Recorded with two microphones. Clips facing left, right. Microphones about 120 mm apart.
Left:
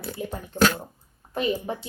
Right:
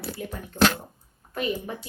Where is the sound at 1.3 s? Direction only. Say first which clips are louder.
Left 3 dB; 30° left (ahead or behind).